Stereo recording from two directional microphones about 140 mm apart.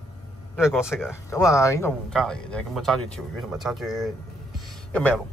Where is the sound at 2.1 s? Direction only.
5° left (ahead or behind).